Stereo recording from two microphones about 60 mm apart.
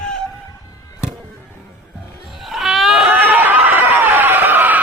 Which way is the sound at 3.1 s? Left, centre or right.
Right.